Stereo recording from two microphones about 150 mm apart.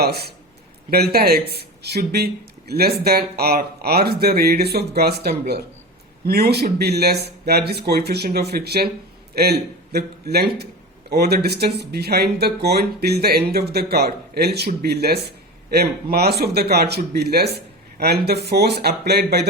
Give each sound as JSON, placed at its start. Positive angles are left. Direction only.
{"t": 0.0, "sound": "a man's voice", "side_deg": -90}